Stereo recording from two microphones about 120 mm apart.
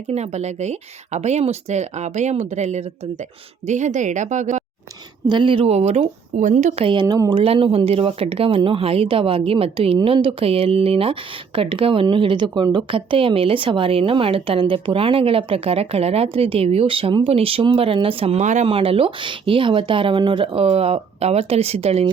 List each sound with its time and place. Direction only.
0.1 s speech: 65° right (ahead or behind)
3.7 s a woman's voice: 80° right
5.3 s a woman's voice: 45° right (ahead or behind); by 6.8 s 75° right (ahead or behind)
6.8 s speech: 40° right (ahead or behind)
7.4 s speech: 50° right (ahead or behind)